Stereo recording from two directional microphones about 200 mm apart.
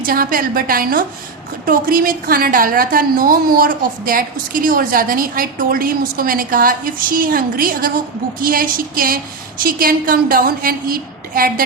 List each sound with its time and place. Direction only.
0.0 s a woman's voice: 45° right (ahead or behind)